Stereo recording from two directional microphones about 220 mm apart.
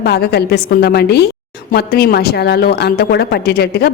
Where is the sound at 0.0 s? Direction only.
45° left (ahead or behind).